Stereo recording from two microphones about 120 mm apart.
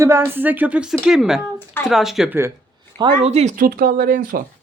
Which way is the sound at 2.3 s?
20° right (ahead or behind).